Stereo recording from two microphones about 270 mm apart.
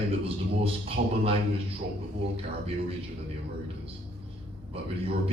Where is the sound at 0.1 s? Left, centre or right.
Right.